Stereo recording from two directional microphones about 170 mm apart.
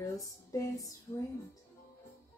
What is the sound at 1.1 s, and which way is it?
Speech, 35° left (ahead or behind).